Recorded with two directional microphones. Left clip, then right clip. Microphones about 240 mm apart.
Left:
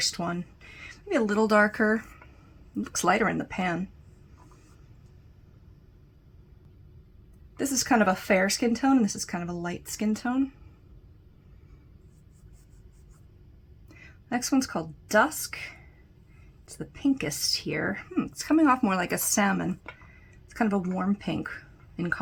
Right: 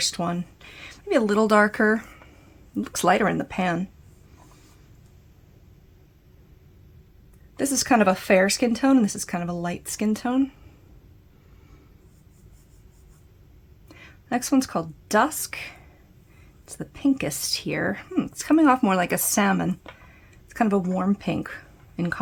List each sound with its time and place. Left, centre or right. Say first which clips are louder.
0.0 s speech: right 3 dB; right
7.5 s speech: right 4 dB; right
13.8 s speech: right 6 dB; right